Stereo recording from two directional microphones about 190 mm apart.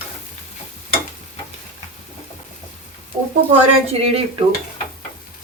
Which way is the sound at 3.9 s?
30° right (ahead or behind).